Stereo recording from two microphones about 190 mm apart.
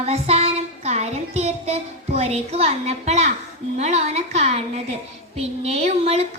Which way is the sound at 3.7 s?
35° right (ahead or behind).